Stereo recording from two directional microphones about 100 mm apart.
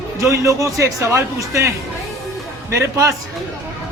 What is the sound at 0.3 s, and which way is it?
A man's voice, 30° right (ahead or behind).